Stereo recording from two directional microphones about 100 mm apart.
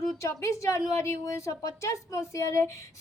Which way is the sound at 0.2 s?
30° left (ahead or behind).